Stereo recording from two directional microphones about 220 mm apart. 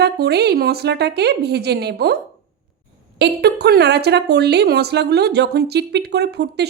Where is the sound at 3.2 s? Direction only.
50° right (ahead or behind).